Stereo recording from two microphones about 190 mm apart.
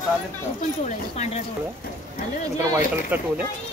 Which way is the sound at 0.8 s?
35° left (ahead or behind).